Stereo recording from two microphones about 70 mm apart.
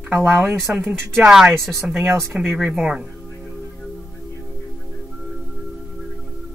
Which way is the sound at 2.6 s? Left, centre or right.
Centre.